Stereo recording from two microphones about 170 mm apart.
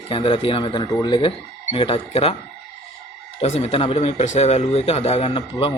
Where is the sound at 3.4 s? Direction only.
35° left (ahead or behind).